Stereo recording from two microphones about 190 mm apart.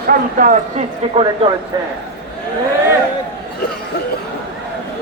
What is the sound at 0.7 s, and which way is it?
Speech, 30° right (ahead or behind).